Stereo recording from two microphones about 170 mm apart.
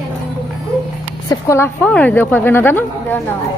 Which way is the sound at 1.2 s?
15° left (ahead or behind).